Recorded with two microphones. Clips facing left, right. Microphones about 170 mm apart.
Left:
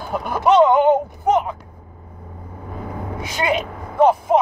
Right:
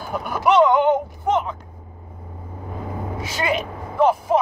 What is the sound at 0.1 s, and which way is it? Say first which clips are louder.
Speech: left 2 dB; 20° left (ahead or behind).